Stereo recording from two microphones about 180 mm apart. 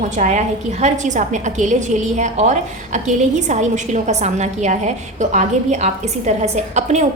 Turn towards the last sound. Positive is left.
turn(degrees=-40)  # may be behind; listen again after turning